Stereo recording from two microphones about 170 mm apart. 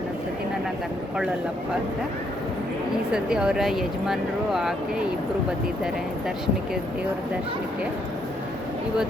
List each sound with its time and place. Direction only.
3.1 s speech: 5° right (ahead or behind)